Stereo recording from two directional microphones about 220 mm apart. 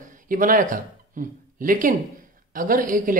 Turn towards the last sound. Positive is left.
turn(degrees=-40)  # may be behind; listen again after turning